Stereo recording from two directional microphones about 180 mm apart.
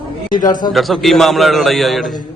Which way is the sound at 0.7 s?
Centre (ahead or behind).